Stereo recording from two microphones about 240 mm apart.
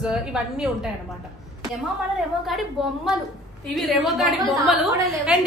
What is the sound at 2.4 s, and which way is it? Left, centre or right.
Speech, centre.